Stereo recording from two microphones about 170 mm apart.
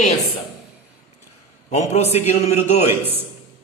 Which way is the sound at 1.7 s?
40° left (ahead or behind).